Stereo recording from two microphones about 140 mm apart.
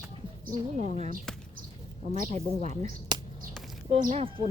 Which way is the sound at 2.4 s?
55° right (ahead or behind).